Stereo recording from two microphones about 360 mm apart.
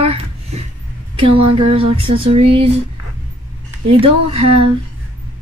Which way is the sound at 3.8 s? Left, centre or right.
Right.